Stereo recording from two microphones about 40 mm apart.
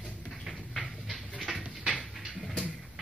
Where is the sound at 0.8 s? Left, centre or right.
Centre.